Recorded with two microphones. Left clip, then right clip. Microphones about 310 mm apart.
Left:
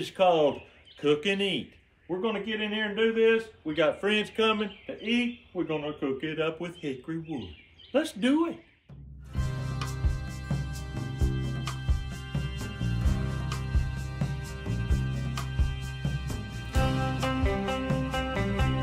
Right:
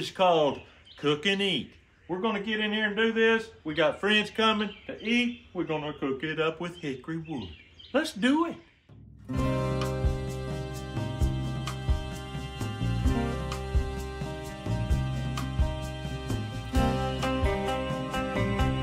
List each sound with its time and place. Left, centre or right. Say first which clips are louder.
0.0 s a man's voice: even; centre
9.3 s music: right 10 dB; centre